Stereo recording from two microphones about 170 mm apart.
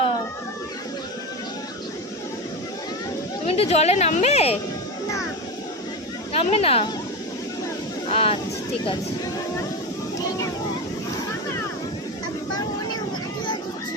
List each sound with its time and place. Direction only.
3.4 s speech: 35° left (ahead or behind)
6.3 s speech: 35° left (ahead or behind)
8.1 s speech: 35° left (ahead or behind)